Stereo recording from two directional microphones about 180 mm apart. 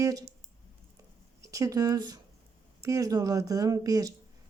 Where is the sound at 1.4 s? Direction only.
20° right (ahead or behind).